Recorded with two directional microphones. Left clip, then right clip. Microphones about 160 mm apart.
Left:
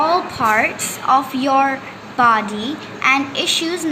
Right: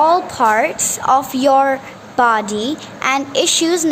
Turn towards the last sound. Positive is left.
turn(degrees=-65)  # may be behind; listen again after turning